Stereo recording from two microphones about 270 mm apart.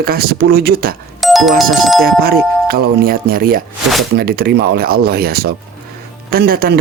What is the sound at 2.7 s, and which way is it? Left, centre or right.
Speech, right.